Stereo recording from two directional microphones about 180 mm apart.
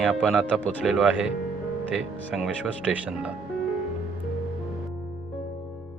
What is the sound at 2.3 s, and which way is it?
Speech, 5° right (ahead or behind).